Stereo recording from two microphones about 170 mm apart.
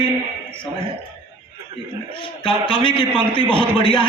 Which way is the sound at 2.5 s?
30° left (ahead or behind).